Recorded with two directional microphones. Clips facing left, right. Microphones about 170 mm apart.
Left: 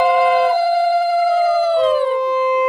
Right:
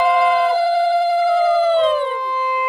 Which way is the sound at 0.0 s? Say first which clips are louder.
Left 2 dB; 10° left (ahead or behind).